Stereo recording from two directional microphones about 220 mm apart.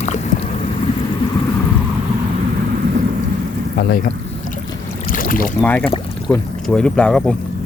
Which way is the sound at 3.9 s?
40° left (ahead or behind).